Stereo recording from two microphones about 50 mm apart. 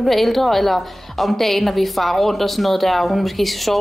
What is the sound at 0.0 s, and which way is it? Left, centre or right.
A woman's voice, centre.